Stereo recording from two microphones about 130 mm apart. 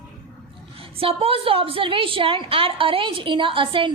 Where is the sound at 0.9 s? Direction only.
45° right (ahead or behind).